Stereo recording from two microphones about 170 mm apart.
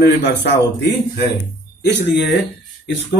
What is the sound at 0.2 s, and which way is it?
Speech, 90° left.